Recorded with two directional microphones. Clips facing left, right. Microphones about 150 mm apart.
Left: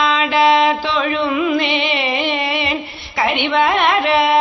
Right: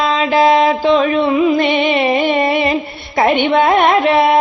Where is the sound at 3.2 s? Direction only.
45° right (ahead or behind).